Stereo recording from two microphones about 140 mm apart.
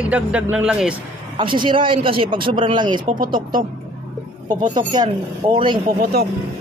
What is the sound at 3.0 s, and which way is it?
Speech, 90° right.